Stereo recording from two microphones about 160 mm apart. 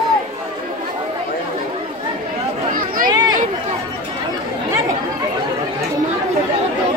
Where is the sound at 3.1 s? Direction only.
25° right (ahead or behind).